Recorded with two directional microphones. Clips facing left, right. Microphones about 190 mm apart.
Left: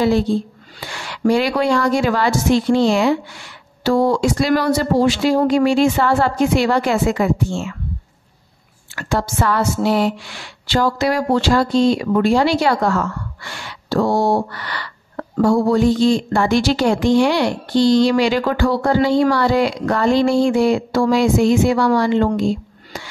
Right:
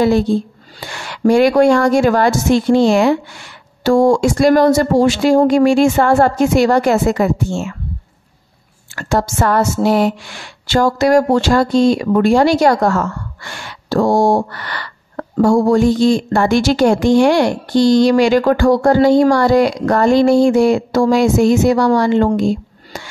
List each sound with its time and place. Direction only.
0.7 s a woman's voice: 50° right (ahead or behind)
8.9 s a woman's voice: 45° right (ahead or behind)
22.4 s a sound: 45° right (ahead or behind)